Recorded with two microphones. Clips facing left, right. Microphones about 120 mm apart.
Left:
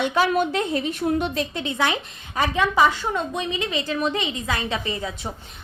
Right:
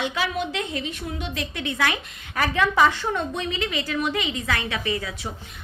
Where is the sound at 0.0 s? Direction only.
45° left (ahead or behind).